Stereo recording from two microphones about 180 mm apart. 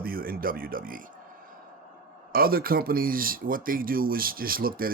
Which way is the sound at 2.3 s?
55° right (ahead or behind).